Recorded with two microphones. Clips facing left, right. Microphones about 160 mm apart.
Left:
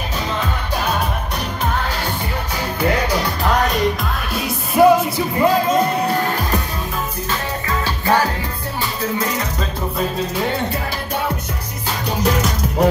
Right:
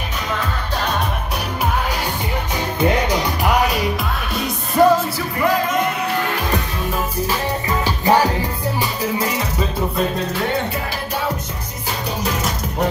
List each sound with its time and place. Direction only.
2.8 s music: 20° right (ahead or behind); by 5.2 s 10° left (ahead or behind)
5.4 s music: 30° left (ahead or behind)
7.2 s music: 15° right (ahead or behind)